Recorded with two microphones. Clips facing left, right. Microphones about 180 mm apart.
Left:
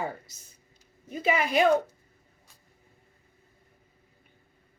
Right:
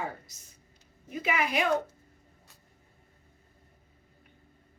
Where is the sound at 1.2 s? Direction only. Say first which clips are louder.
Left 4 dB; 30° left (ahead or behind).